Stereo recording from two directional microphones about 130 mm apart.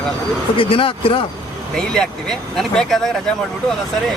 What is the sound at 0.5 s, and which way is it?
Speech, 45° left (ahead or behind).